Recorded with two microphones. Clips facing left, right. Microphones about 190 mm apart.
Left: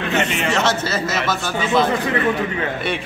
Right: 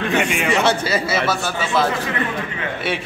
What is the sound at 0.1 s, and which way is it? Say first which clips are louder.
A man's voice: even; 10° right (ahead or behind).